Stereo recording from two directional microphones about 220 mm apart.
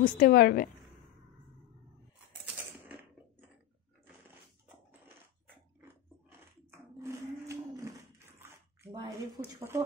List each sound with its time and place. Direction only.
0.0 s a woman's voice: 45° left (ahead or behind)
2.4 s typewriter: 5° right (ahead or behind)
7.0 s cattle: 15° right (ahead or behind)
8.4 s a sound: 10° right (ahead or behind)